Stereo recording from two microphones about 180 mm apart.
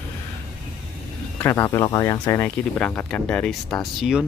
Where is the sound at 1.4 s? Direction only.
15° left (ahead or behind).